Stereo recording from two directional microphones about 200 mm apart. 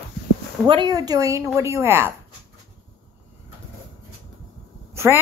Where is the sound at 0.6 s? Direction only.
25° right (ahead or behind).